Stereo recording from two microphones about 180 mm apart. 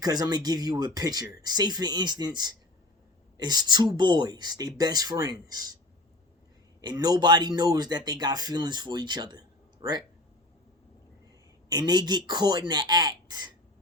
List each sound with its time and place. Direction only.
0.0 s speech: 20° right (ahead or behind)
6.8 s speech: 20° right (ahead or behind)
11.7 s speech: 20° right (ahead or behind)